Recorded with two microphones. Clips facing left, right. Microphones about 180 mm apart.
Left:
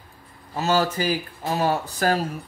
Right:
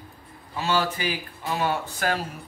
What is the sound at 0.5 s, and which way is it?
Speech, 40° left (ahead or behind).